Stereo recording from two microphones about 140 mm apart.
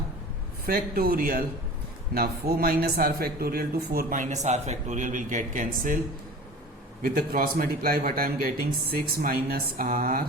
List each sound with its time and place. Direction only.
0.6 s a man's voice: 90° right; by 6.0 s 70° right (ahead or behind)
7.0 s a man's voice: 90° right